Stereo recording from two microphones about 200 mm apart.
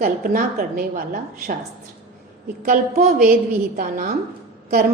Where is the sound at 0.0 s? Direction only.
45° right (ahead or behind).